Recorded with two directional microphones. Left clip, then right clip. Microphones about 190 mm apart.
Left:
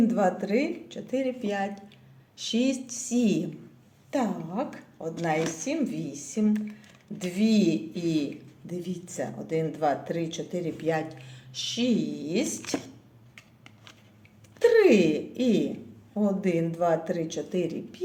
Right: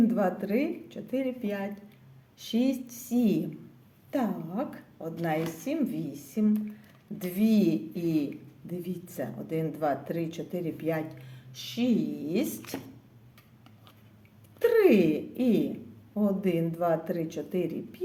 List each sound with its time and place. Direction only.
0.0 s speech: 15° right (ahead or behind)
7.3 s speech: 15° right (ahead or behind)
14.6 s speech: 15° right (ahead or behind)